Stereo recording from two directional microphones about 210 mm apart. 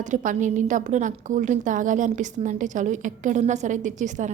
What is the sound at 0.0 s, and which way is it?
A woman's voice, 35° right (ahead or behind).